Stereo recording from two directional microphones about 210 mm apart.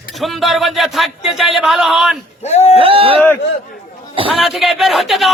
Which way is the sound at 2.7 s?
25° right (ahead or behind).